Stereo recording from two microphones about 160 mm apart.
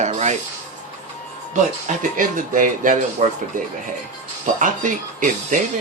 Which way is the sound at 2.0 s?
55° right (ahead or behind).